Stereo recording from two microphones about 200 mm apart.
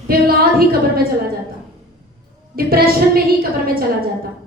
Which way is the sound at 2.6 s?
50° right (ahead or behind).